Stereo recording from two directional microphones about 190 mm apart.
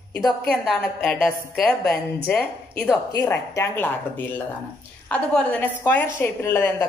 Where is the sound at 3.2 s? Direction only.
15° left (ahead or behind).